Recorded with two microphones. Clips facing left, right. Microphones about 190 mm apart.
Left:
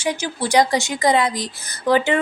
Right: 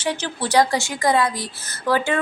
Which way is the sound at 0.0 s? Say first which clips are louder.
Left 2 dB; 10° left (ahead or behind).